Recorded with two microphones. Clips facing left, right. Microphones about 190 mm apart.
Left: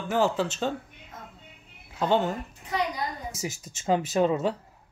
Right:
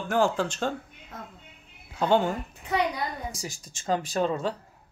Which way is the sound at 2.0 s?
Centre (ahead or behind).